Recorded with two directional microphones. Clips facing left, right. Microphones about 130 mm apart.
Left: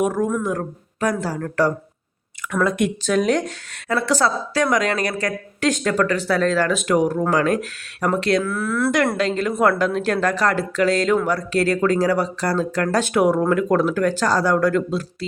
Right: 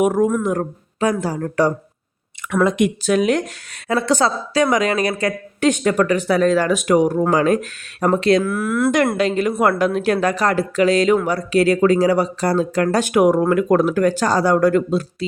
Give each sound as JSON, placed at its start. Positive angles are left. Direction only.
{"t": 0.0, "sound": "speech", "side_deg": -20}